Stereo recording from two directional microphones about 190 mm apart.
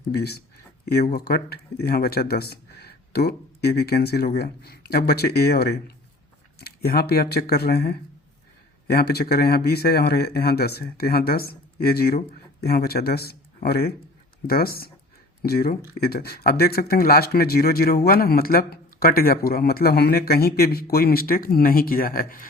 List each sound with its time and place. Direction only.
0.1 s speech: 55° left (ahead or behind)